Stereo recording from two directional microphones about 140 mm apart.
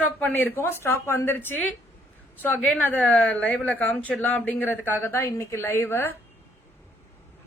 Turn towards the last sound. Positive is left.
turn(degrees=15)  # may be behind; listen again after turning